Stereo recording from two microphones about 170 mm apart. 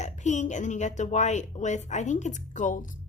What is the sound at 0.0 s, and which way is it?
Speech, 45° left (ahead or behind).